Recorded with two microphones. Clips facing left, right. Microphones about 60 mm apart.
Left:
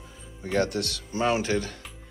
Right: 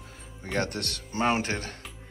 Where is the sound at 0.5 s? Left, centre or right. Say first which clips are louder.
Left 4 dB; right.